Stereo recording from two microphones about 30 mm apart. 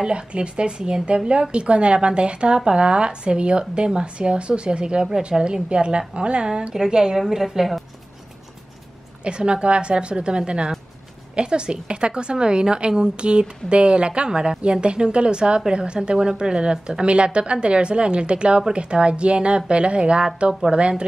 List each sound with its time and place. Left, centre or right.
0.1 s a woman's voice: right
7.2 s a woman's voice: centre
9.2 s a woman's voice: right